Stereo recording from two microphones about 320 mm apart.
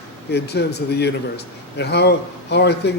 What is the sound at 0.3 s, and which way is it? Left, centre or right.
A man's voice, left.